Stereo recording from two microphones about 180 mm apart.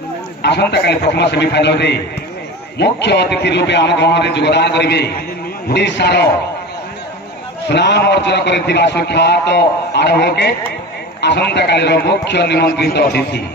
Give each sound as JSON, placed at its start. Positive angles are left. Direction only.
{"t": 0.4, "sound": "a man's voice", "side_deg": 70}
{"t": 7.7, "sound": "a man's voice", "side_deg": 70}